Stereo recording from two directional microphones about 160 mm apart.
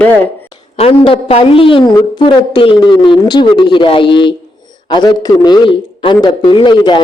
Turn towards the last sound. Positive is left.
turn(degrees=30)  # may be behind; listen again after turning